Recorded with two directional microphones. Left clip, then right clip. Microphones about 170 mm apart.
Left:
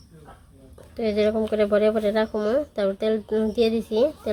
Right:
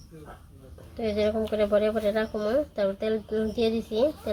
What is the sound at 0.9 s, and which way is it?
A woman's voice, 60° left (ahead or behind).